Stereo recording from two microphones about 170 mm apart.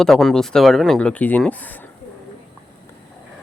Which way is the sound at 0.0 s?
Centre (ahead or behind).